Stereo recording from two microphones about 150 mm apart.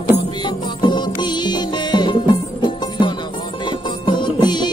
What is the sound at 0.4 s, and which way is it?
Music, 30° left (ahead or behind).